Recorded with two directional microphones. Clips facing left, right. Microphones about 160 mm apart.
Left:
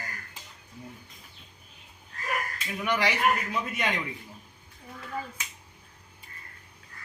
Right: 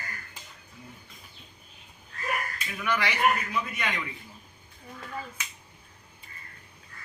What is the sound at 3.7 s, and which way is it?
Speech, 25° left (ahead or behind).